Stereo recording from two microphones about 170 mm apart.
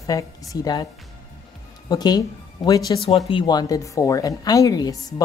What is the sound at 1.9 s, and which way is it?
A woman's voice, 25° left (ahead or behind).